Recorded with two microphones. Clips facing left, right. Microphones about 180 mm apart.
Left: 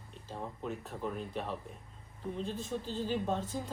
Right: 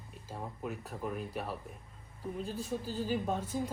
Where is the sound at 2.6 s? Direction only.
10° right (ahead or behind).